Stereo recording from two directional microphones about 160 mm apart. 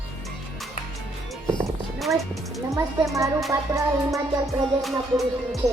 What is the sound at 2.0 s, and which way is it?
Music, centre (ahead or behind).